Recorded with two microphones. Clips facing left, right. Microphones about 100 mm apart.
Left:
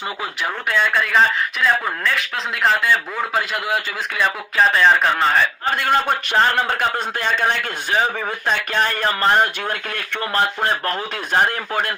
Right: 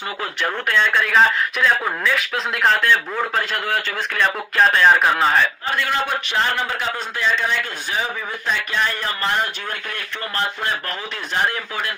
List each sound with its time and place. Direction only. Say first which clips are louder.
0.4 s speech: right 1 dB; 5° left (ahead or behind)
5.8 s speech: left 4 dB; 45° left (ahead or behind)
6.7 s speech: left 4 dB; 55° left (ahead or behind)